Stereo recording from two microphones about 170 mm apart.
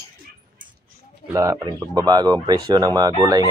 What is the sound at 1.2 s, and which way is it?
Speech, 20° right (ahead or behind).